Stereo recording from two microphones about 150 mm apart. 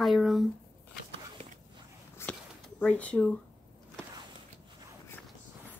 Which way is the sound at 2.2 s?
15° left (ahead or behind).